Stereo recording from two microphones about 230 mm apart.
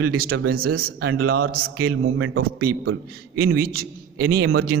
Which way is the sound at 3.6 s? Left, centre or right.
Right.